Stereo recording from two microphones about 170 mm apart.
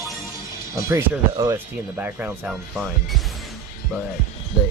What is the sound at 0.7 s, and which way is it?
Speech, 15° right (ahead or behind).